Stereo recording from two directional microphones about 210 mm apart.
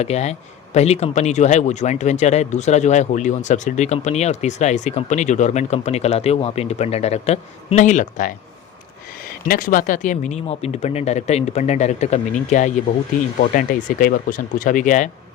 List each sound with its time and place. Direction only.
0.0 s speech: 30° left (ahead or behind)
9.5 s speech: 45° left (ahead or behind)